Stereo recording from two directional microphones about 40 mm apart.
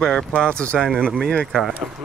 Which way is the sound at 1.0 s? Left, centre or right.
Centre.